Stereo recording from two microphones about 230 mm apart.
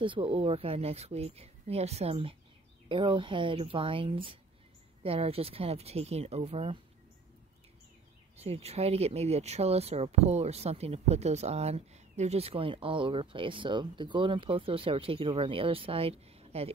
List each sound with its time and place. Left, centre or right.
0.0 s speech: right
8.4 s speech: right